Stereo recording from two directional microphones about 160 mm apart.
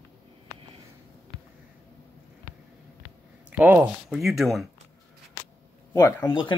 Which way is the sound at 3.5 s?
10° right (ahead or behind).